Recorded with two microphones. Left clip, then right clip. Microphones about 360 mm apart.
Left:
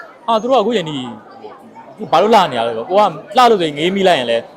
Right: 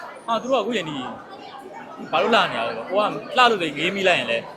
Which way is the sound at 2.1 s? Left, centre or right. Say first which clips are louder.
Left 8 dB; left.